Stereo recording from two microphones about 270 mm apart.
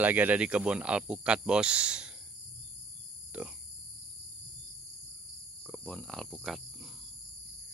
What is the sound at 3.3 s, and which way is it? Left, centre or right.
Speech, centre.